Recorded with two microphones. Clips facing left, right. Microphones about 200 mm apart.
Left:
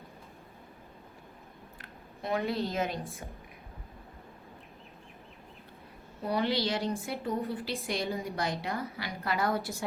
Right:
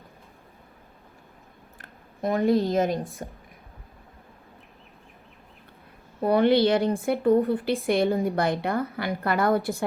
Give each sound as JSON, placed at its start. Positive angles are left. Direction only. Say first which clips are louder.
{"t": 1.8, "sound": "speech", "louder": "right 11 dB", "side_deg": -50}
{"t": 6.2, "sound": "speech", "louder": "right 10 dB", "side_deg": -55}